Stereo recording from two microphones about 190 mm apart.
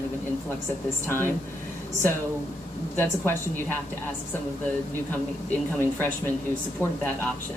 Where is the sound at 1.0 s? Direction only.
10° left (ahead or behind).